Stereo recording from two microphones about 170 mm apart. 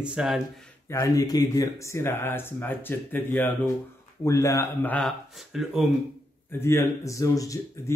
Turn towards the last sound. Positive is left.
turn(degrees=20)  # may be behind; listen again after turning